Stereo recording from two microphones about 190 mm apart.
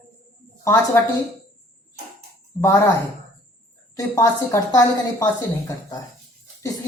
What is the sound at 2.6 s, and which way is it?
Speech, 15° left (ahead or behind).